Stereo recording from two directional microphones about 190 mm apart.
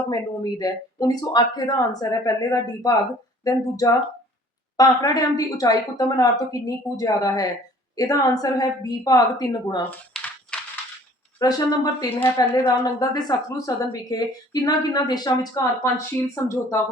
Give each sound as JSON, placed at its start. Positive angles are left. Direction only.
{"t": 0.1, "sound": "speech", "side_deg": 20}
{"t": 9.9, "sound": "a sound", "side_deg": 5}
{"t": 11.3, "sound": "speech", "side_deg": 20}